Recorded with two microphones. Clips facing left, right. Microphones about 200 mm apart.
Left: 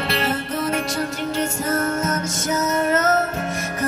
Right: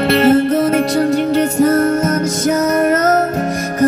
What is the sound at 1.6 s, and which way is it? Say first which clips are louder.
Music: right 11 dB; 35° right (ahead or behind).